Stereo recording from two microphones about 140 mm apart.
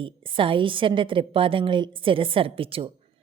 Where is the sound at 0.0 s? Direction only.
40° right (ahead or behind).